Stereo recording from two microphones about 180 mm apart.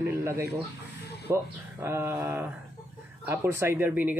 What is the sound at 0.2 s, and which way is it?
A man's voice, 15° right (ahead or behind).